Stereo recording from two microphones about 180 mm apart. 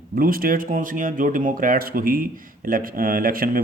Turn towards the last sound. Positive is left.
turn(degrees=-55)  # may be behind; listen again after turning